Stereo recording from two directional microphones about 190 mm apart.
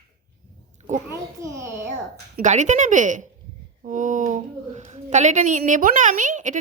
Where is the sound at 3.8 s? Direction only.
40° right (ahead or behind).